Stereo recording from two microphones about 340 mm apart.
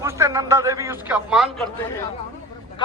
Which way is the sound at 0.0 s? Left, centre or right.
Centre.